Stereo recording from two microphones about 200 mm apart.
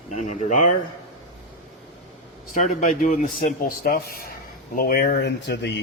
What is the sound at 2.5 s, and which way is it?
Speech, 40° left (ahead or behind).